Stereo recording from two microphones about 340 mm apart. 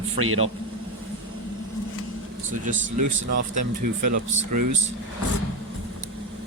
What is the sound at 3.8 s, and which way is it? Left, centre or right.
Speech, right.